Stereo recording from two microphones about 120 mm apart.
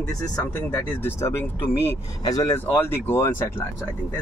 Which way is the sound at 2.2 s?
30° left (ahead or behind).